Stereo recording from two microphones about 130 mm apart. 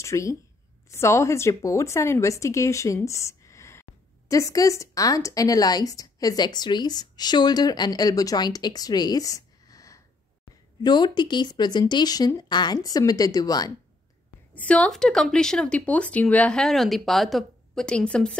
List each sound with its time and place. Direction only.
0.0 s a woman's voice: 25° left (ahead or behind)
14.5 s speech: 10° left (ahead or behind)